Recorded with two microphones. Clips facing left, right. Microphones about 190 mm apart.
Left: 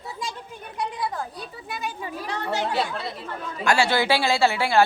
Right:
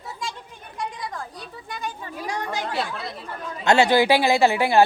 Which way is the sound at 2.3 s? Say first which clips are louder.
Left 1 dB; 10° right (ahead or behind).